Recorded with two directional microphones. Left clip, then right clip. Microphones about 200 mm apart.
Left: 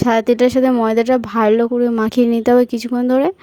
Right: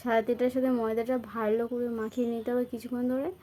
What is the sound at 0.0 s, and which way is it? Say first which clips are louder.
Speech: left 13 dB; 50° left (ahead or behind).